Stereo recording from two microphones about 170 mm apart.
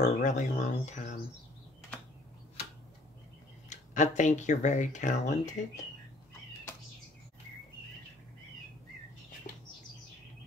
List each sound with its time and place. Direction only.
0.0 s speech: 45° left (ahead or behind)
3.6 s speech: 45° left (ahead or behind)
9.5 s bird: 50° left (ahead or behind)